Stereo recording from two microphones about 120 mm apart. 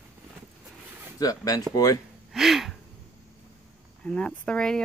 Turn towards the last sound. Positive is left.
turn(degrees=10)  # may be behind; listen again after turning